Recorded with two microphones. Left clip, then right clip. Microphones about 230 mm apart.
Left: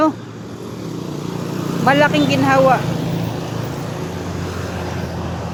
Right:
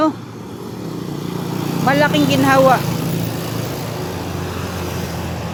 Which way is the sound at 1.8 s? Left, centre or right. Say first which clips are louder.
Left 1 dB; centre.